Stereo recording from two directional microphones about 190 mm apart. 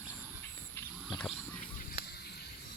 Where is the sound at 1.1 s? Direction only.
Centre (ahead or behind).